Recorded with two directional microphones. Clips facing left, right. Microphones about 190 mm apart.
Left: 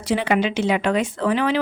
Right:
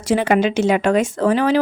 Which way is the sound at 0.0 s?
45° right (ahead or behind).